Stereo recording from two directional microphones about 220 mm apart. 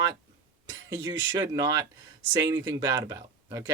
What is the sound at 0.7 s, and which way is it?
Speech, 20° right (ahead or behind).